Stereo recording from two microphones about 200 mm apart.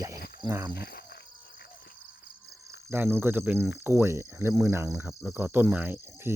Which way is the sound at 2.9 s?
10° right (ahead or behind).